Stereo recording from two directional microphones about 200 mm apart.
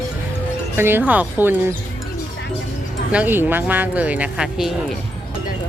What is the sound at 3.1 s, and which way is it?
Speech, 10° right (ahead or behind).